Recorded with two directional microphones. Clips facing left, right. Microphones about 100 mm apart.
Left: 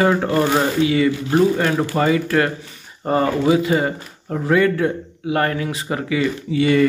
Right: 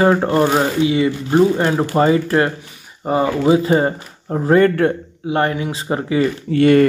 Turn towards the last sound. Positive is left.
turn(degrees=-55)  # may be behind; listen again after turning